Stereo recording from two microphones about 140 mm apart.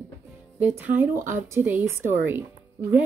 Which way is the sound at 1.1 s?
65° right (ahead or behind).